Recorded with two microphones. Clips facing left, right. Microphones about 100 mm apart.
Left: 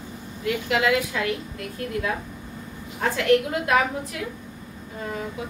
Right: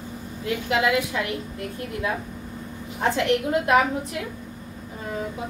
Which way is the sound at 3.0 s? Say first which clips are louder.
Left 2 dB; 25° right (ahead or behind).